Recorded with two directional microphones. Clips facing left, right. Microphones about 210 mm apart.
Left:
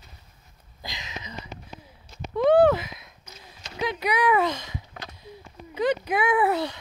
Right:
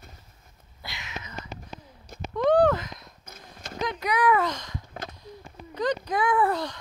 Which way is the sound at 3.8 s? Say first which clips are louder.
Left 1 dB; 10° left (ahead or behind).